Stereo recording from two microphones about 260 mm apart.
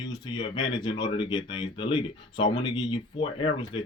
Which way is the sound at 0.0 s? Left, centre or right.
Centre.